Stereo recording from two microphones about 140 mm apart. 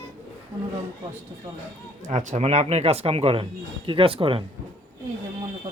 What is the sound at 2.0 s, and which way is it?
Speech, 60° right (ahead or behind).